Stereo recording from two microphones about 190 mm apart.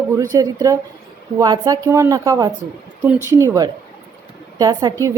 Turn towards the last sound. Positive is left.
turn(degrees=-20)  # may be behind; listen again after turning